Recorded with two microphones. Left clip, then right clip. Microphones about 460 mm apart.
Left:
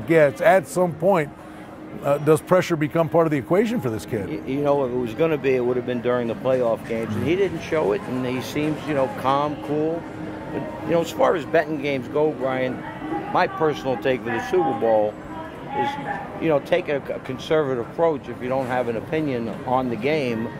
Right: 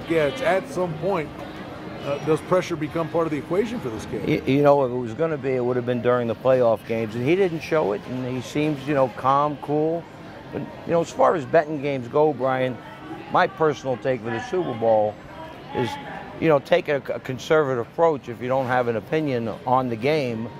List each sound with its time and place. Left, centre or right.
0.1 s a man's voice: left
4.3 s speech: right
5.0 s speech: right
7.9 s speech: right
10.9 s speech: right
13.3 s speech: right
15.8 s speech: right